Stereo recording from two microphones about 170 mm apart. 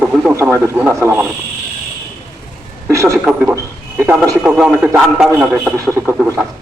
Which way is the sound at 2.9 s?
20° right (ahead or behind).